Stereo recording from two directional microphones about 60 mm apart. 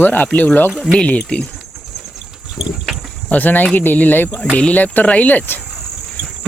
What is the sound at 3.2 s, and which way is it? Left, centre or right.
Speech, left.